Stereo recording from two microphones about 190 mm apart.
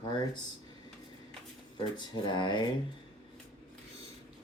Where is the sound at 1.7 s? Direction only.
25° left (ahead or behind).